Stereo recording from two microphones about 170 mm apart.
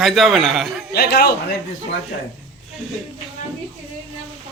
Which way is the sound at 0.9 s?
75° left (ahead or behind).